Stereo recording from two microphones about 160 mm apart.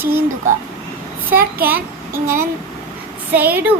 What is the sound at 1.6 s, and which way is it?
A child's voice, 15° right (ahead or behind).